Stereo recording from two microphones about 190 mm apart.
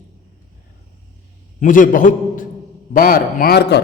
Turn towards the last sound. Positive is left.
turn(degrees=60)  # may be behind; listen again after turning